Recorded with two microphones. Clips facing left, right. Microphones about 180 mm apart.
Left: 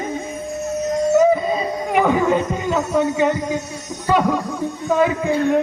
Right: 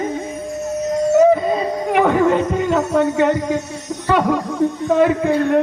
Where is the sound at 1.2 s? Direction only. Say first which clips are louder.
Right 3 dB; 65° right (ahead or behind).